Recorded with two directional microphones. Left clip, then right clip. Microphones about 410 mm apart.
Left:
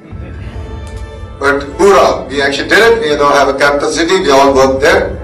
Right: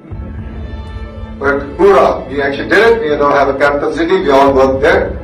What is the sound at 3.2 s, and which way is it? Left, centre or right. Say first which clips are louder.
Speech: left 2 dB; centre.